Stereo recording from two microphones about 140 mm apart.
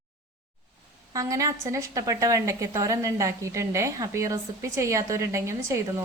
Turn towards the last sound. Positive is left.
turn(degrees=-20)  # may be behind; listen again after turning